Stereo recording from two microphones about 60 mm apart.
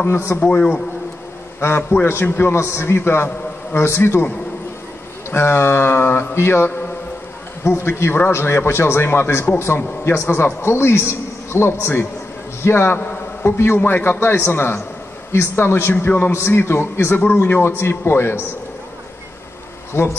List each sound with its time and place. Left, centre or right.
0.1 s a man's voice: left
0.4 s a man's voice: centre
1.8 s a man's voice: left
5.3 s a man's voice: left
15.9 s a man's voice: left
17.2 s a man's voice: left
19.9 s speech: left